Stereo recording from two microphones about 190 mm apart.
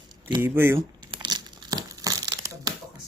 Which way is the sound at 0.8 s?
25° right (ahead or behind).